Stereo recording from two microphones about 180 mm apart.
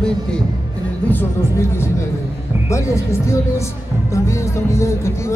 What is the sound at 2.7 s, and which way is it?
Speech, 15° left (ahead or behind).